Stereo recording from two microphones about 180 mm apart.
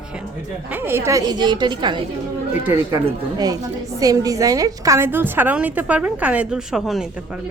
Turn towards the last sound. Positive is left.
turn(degrees=0)  # may be behind; listen again after turning